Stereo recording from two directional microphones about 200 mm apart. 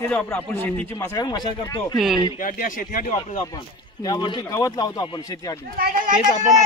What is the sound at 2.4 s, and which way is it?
Speech, 40° left (ahead or behind).